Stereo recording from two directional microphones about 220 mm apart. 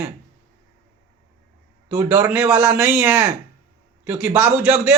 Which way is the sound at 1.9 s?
10° right (ahead or behind).